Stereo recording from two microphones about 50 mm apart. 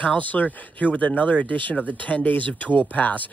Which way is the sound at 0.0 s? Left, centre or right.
Left.